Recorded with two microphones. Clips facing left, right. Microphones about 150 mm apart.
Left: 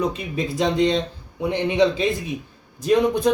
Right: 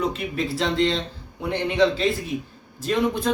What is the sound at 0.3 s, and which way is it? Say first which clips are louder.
A man's voice: left 3 dB; 15° left (ahead or behind).